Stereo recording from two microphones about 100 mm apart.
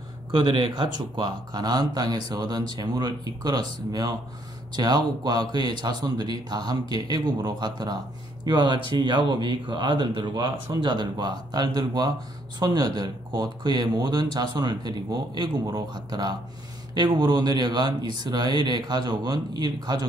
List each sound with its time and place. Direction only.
0.3 s speech: 50° right (ahead or behind)